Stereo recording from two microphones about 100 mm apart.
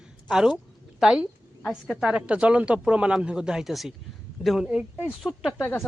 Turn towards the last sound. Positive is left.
turn(degrees=25)  # may be behind; listen again after turning